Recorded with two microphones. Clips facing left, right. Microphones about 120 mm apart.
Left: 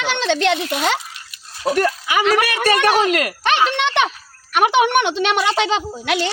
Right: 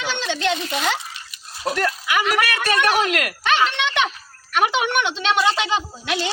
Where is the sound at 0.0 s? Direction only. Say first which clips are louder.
Left 5 dB; 90° left; by 0.8 s 65° left (ahead or behind).